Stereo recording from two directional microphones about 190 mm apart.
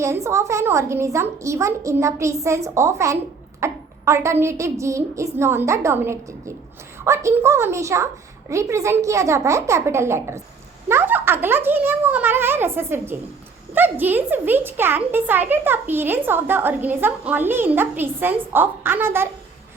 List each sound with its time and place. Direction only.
0.0 s a woman's voice: 15° right (ahead or behind)